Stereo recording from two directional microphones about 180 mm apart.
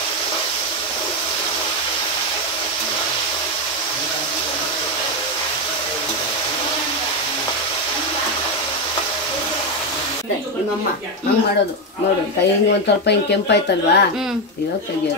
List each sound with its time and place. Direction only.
13.0 s speech: 70° left (ahead or behind)